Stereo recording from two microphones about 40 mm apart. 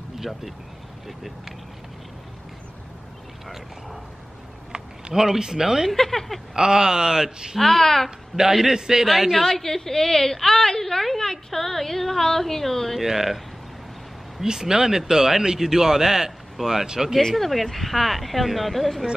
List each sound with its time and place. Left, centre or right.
0.2 s speech: centre
5.1 s speech: centre
5.9 s a woman's voice: centre
6.5 s speech: centre
7.5 s a woman's voice: centre
8.4 s speech: centre
9.3 s a woman's voice: centre
13.0 s speech: centre
14.4 s speech: centre
17.2 s a woman's voice: centre